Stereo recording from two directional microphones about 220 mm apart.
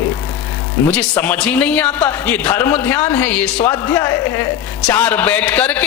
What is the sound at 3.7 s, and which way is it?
A man's voice, 15° left (ahead or behind).